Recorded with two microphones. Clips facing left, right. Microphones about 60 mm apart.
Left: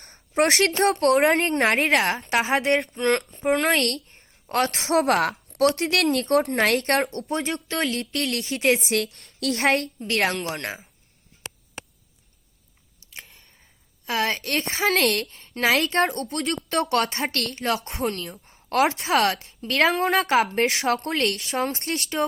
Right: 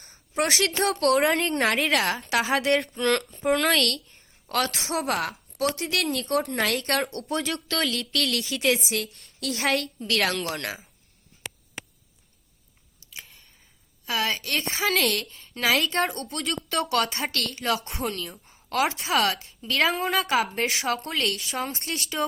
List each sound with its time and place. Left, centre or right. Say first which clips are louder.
0.0 s a woman's voice: left 5 dB; left
7.3 s a woman's voice: left 1 dB; left
13.1 s a sound: left 1 dB; left
14.0 s a woman's voice: left 2 dB; left
20.3 s a woman's voice: left 4 dB; left